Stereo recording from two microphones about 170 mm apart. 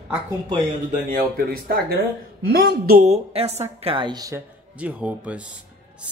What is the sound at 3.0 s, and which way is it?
A woman's voice, 40° right (ahead or behind).